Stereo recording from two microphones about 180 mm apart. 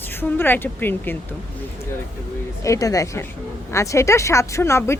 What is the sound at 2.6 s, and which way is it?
Speech, 20° left (ahead or behind).